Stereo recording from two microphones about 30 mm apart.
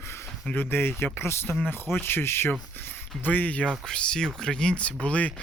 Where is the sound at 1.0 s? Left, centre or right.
Left.